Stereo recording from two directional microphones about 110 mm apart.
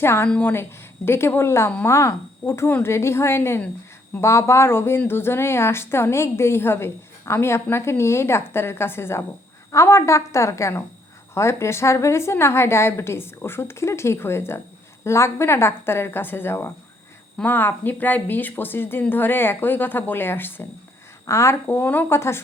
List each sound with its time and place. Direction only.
0.0 s speech: 20° left (ahead or behind)
0.3 s a woman's voice: 10° left (ahead or behind)
0.5 s speech: 20° left (ahead or behind)